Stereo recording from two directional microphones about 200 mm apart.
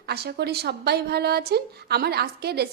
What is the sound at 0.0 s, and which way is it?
A woman's voice, 55° right (ahead or behind).